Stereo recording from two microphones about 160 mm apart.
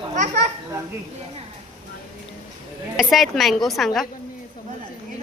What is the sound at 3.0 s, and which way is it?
A woman's voice, centre (ahead or behind).